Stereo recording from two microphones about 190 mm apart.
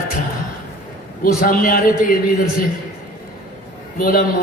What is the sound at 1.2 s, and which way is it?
A man's voice, 50° left (ahead or behind).